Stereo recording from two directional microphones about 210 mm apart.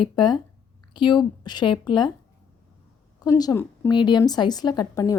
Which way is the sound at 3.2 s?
20° left (ahead or behind).